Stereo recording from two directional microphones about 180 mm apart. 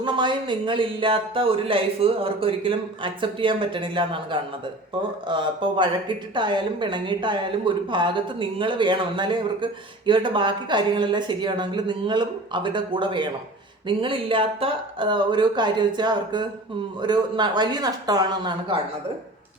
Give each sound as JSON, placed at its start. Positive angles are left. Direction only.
{"t": 0.0, "sound": "speech", "side_deg": -25}